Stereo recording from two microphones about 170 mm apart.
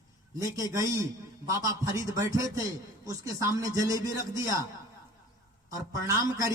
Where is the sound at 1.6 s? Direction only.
20° right (ahead or behind).